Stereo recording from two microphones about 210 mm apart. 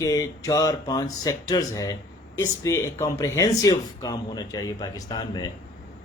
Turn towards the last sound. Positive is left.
turn(degrees=20)  # may be behind; listen again after turning